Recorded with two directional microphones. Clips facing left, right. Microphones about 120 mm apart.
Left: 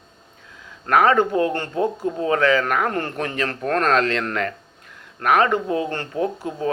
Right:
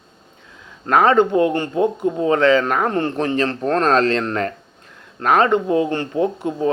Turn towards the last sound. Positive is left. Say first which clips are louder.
# right 4 dB
turn(degrees=-25)  # may be behind; listen again after turning